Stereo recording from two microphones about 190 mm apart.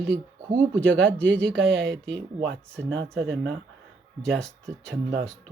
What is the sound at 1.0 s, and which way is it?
Speech, 70° right (ahead or behind).